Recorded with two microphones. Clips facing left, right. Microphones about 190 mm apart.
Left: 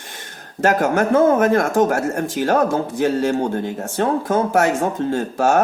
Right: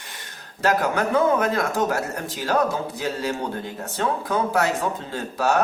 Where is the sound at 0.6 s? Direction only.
50° left (ahead or behind).